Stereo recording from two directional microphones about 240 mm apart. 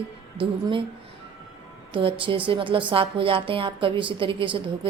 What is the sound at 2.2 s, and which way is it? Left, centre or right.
Speech, right.